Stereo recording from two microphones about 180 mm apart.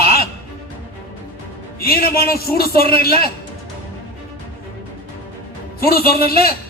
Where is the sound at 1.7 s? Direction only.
55° left (ahead or behind).